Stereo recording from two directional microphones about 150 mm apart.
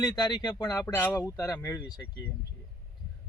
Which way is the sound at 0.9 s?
15° left (ahead or behind).